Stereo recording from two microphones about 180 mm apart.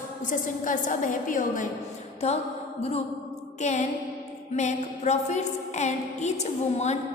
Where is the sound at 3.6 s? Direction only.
40° left (ahead or behind).